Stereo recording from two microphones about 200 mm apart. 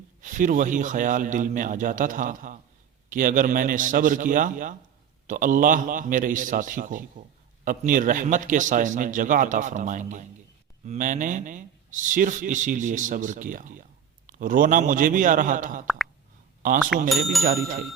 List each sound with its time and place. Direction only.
0.2 s speech: 40° right (ahead or behind)
16.9 s speech: centre (ahead or behind)